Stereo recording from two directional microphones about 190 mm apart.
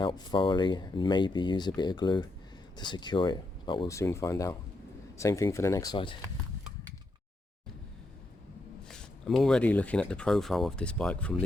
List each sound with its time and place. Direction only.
0.0 s speech: 25° left (ahead or behind)
8.9 s speech: 5° left (ahead or behind)